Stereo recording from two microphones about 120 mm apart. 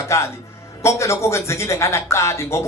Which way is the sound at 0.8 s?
25° left (ahead or behind).